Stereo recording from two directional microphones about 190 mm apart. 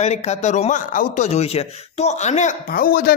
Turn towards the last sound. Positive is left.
turn(degrees=50)  # may be behind; listen again after turning